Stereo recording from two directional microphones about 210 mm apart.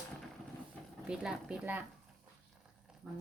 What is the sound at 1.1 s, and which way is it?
Speech, 5° right (ahead or behind).